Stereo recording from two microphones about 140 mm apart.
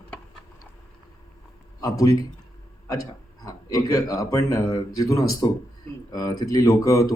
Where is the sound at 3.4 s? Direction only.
25° left (ahead or behind).